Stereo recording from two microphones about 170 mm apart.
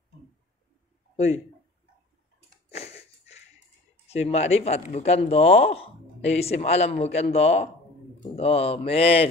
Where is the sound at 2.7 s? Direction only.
35° left (ahead or behind).